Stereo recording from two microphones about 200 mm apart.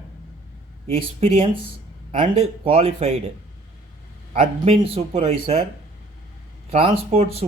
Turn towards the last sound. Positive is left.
turn(degrees=-30)  # may be behind; listen again after turning